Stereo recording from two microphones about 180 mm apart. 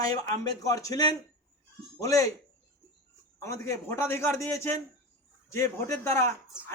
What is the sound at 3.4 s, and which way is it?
Speech, 15° left (ahead or behind).